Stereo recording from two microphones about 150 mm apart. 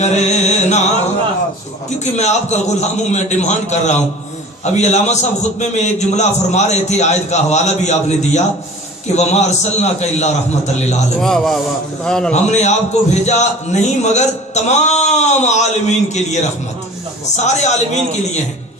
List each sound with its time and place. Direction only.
0.0 s a man's voice: 50° left (ahead or behind)
2.1 s a man's voice: 50° left (ahead or behind)
11.2 s a man's voice: 5° left (ahead or behind)
12.3 s a man's voice: 50° left (ahead or behind)